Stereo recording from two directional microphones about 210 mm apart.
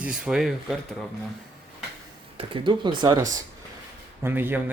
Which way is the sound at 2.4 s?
25° right (ahead or behind).